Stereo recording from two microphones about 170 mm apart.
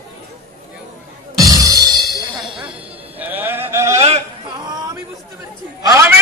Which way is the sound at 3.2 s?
10° right (ahead or behind).